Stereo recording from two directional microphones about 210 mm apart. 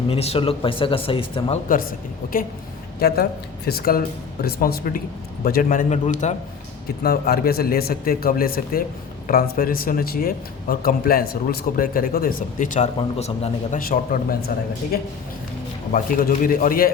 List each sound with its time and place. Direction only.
0.1 s speech: 30° left (ahead or behind)
1.6 s a man's voice: 40° left (ahead or behind)
3.7 s a man's voice: 45° left (ahead or behind)
7.0 s a man's voice: 45° left (ahead or behind)
15.9 s a man's voice: 40° left (ahead or behind)